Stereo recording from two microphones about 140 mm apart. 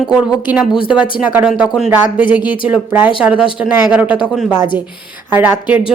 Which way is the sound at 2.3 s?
35° left (ahead or behind).